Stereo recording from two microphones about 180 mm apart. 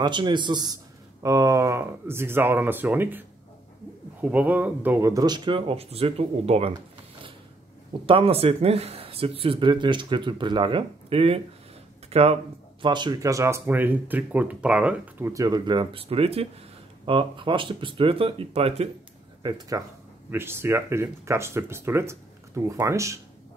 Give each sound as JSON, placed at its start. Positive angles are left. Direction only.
{"t": 0.0, "sound": "speech", "side_deg": -25}
{"t": 8.1, "sound": "speech", "side_deg": -30}
{"t": 19.7, "sound": "speech", "side_deg": -20}